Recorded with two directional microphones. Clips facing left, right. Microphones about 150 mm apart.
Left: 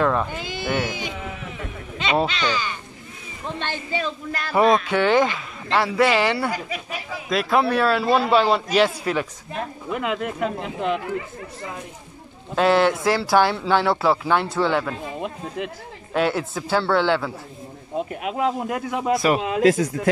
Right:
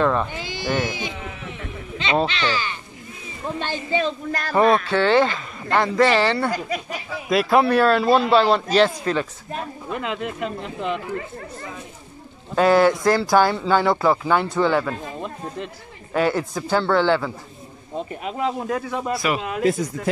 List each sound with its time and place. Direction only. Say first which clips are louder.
0.0 s speech: right 1 dB; 5° left (ahead or behind)
2.0 s speech: even; 5° left (ahead or behind)
3.5 s a woman's voice: right 4 dB; 15° right (ahead or behind)
4.0 s speech: right 3 dB; 40° right (ahead or behind)
4.6 s speech: even; 15° left (ahead or behind)
7.2 s speech: right 3 dB; 5° right (ahead or behind)
10.6 s speech: left 2 dB; 50° left (ahead or behind)
12.5 s speech: right 2 dB; centre (ahead or behind)
19.2 s speech: left 3 dB; 35° left (ahead or behind)
19.6 s speech: left 3 dB; 90° left